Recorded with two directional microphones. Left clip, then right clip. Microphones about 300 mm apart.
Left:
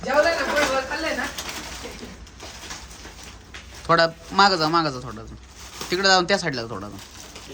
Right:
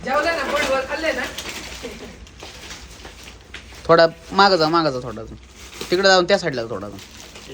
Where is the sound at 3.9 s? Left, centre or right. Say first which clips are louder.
Right 5 dB; centre.